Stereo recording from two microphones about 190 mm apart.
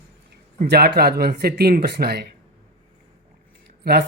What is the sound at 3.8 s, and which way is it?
Speech, 55° right (ahead or behind).